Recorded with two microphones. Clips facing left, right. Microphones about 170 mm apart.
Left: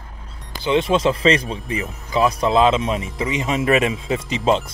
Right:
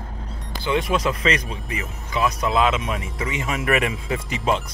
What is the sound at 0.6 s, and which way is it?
Speech, 25° left (ahead or behind).